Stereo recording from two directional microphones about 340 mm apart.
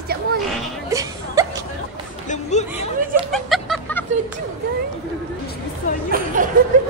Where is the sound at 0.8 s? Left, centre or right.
Centre.